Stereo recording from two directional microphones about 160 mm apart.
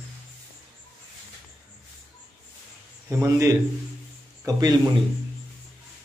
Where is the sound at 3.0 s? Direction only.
20° right (ahead or behind).